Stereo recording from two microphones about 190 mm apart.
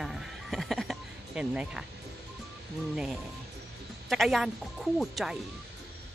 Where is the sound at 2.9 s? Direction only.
5° right (ahead or behind).